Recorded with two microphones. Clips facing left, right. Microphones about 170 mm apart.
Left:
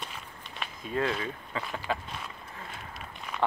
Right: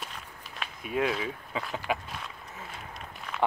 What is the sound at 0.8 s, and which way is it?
Speech, 10° right (ahead or behind).